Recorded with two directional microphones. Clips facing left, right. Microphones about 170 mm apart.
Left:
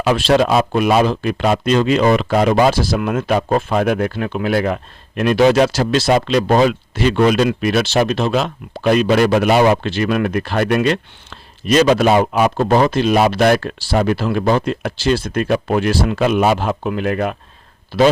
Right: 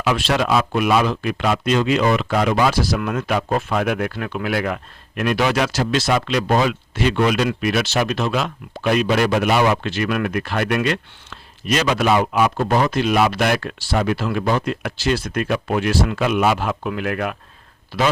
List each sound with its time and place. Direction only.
0.0 s speech: 35° left (ahead or behind)